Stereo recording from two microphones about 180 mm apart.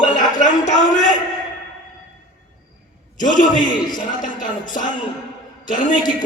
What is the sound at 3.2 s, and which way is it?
Speech, 45° left (ahead or behind).